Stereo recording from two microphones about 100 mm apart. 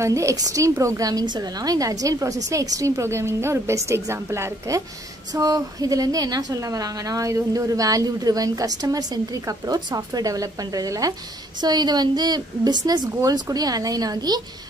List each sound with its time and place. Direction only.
0.0 s a woman's voice: 30° right (ahead or behind)